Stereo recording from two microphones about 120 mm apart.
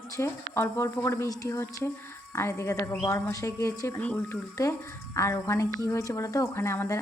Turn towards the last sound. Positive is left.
turn(degrees=25)  # may be behind; listen again after turning